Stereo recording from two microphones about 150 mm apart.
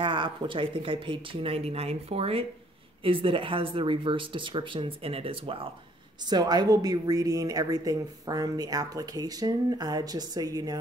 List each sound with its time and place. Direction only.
0.0 s speech: 35° right (ahead or behind)
6.2 s a woman's voice: 30° right (ahead or behind)